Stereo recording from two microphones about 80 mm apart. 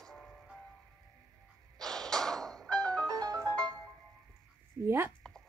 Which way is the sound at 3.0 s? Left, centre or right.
Right.